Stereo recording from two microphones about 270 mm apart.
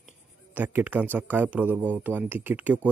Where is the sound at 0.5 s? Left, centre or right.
Centre.